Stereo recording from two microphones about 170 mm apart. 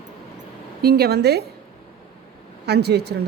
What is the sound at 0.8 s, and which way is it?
Speech, 70° right (ahead or behind).